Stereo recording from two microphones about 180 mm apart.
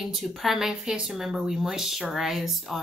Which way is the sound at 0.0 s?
Centre (ahead or behind).